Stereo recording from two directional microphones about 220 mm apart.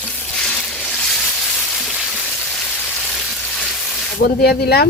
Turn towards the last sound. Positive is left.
turn(degrees=45)  # may be behind; listen again after turning